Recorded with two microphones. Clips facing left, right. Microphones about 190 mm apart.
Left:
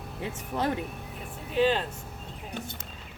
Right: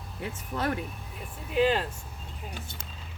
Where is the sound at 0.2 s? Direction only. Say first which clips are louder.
Left 2 dB; 20° left (ahead or behind).